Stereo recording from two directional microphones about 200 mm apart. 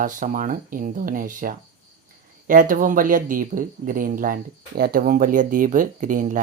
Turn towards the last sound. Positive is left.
turn(degrees=-40)  # may be behind; listen again after turning